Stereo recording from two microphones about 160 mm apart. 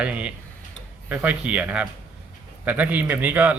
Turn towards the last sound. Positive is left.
turn(degrees=-10)  # may be behind; listen again after turning